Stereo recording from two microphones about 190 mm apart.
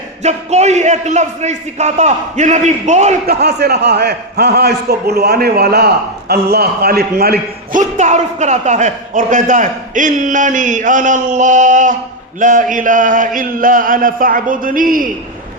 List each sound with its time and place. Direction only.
0.2 s a man's voice: 35° right (ahead or behind)
3.2 s a man's voice: 60° right (ahead or behind)